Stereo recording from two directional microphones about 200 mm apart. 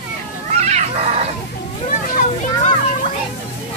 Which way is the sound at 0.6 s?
35° right (ahead or behind).